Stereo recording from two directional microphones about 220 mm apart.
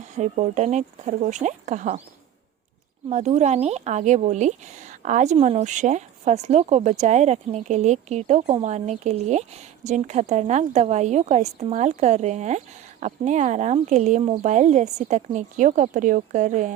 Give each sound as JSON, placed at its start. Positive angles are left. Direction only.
{"t": 0.0, "sound": "speech", "side_deg": -35}
{"t": 3.1, "sound": "speech", "side_deg": -30}